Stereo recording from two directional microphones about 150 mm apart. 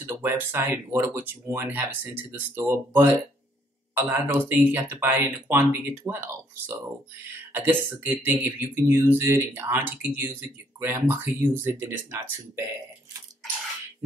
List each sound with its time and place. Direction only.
0.0 s speech: 15° right (ahead or behind)